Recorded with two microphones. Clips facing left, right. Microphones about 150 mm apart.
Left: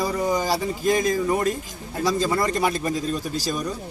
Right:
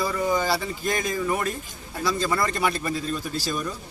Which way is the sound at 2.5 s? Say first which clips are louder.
Left 3 dB; 35° left (ahead or behind).